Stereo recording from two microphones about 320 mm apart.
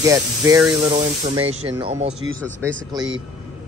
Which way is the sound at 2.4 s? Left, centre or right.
Centre.